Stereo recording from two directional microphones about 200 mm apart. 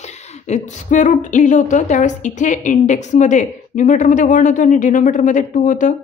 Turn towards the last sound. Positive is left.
turn(degrees=40)  # may be behind; listen again after turning